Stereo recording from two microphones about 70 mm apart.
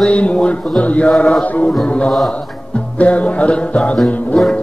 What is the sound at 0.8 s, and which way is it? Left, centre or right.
Music, centre.